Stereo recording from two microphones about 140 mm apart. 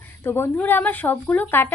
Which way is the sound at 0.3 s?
15° left (ahead or behind).